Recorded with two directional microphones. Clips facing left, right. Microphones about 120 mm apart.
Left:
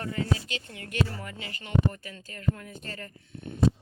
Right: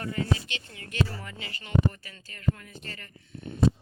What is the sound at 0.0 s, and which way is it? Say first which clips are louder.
Speech: even; 40° left (ahead or behind).